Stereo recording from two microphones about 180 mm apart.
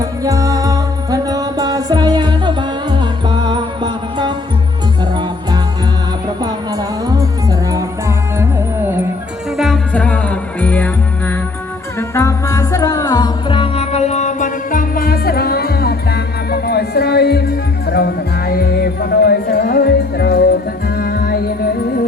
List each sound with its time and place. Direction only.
0.0 s music: 20° right (ahead or behind)
6.4 s music: 20° right (ahead or behind)
9.6 s music: centre (ahead or behind); by 22.0 s 55° left (ahead or behind)